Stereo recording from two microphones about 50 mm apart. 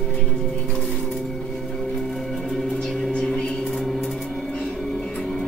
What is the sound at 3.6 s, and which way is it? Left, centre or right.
Music, centre.